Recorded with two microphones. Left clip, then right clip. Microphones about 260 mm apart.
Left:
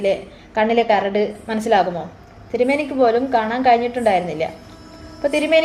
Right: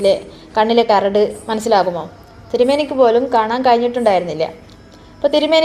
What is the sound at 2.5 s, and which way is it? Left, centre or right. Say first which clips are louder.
Speech: right 4 dB; centre.